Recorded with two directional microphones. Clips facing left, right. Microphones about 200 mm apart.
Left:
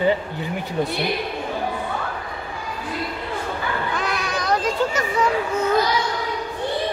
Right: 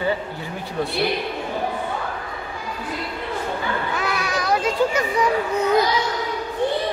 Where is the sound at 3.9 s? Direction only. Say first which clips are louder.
Right 1 dB; 5° right (ahead or behind).